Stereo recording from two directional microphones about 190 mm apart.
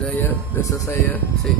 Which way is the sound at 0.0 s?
15° left (ahead or behind).